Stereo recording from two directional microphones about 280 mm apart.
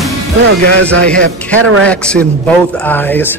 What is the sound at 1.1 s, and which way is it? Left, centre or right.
Speech, centre.